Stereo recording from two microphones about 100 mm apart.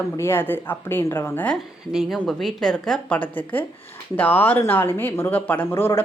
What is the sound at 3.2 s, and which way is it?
A woman's voice, 15° left (ahead or behind).